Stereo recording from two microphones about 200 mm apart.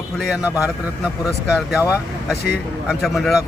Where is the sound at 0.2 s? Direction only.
5° right (ahead or behind).